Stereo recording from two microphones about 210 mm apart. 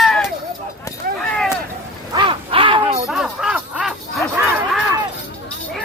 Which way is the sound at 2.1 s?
25° right (ahead or behind).